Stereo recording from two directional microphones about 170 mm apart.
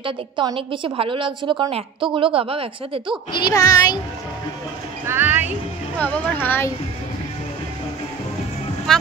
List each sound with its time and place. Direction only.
0.0 s a woman's voice: 30° right (ahead or behind)
3.3 s speech: 25° left (ahead or behind)
5.0 s speech: 10° right (ahead or behind)
5.9 s speech: 10° left (ahead or behind)